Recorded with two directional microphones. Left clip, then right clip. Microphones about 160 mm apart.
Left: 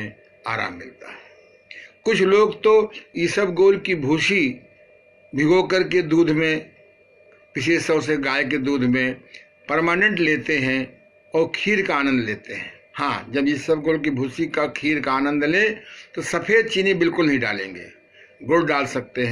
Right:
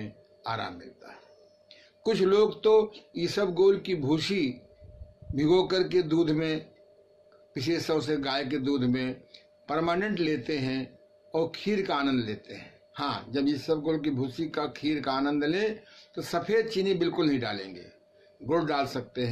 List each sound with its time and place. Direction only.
0.0 s speech: 25° right (ahead or behind)
1.7 s a sound: 25° right (ahead or behind)
2.9 s a man's voice: 30° right (ahead or behind)